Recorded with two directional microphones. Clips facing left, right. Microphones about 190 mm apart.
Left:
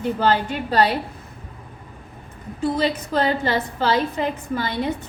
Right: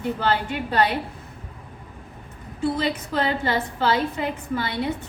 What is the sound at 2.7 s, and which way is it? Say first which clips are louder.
A woman's voice: left 3 dB; 40° left (ahead or behind).